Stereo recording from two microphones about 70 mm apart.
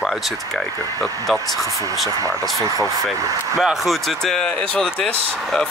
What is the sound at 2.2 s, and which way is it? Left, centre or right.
Speech, right.